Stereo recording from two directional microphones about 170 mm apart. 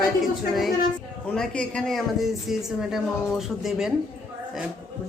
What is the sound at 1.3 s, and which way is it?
Speech, 5° left (ahead or behind).